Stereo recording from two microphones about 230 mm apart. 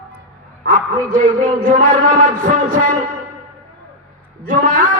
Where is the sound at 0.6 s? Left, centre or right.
Right.